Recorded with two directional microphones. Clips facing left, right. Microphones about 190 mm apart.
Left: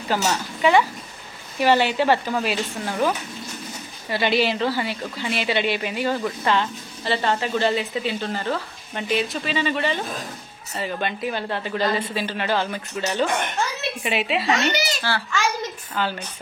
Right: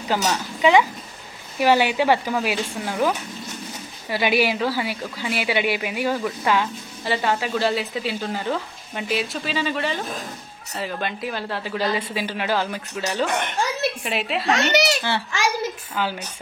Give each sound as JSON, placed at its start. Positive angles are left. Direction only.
{"t": 0.2, "sound": "speech", "side_deg": -15}
{"t": 4.1, "sound": "speech", "side_deg": -10}
{"t": 14.5, "sound": "speech", "side_deg": -70}
{"t": 15.0, "sound": "speech", "side_deg": -20}